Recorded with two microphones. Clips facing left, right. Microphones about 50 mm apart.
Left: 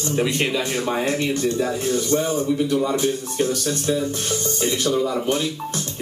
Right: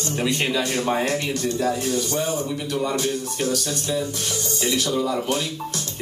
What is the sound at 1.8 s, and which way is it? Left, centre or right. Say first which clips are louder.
A man's voice: left 3 dB; left.